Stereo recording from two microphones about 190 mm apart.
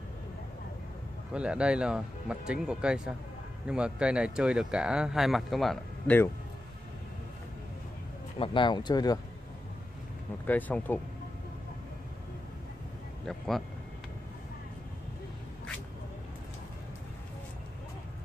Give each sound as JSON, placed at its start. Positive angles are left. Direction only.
{"t": 1.3, "sound": "speech", "side_deg": -5}
{"t": 8.4, "sound": "speech", "side_deg": 25}
{"t": 10.4, "sound": "speech", "side_deg": 10}
{"t": 13.2, "sound": "speech", "side_deg": 0}